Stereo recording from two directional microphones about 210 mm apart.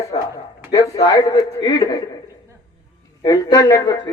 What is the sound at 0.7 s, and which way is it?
A man's voice, 15° left (ahead or behind).